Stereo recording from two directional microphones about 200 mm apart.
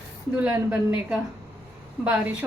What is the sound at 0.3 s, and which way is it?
A woman's voice, 10° right (ahead or behind).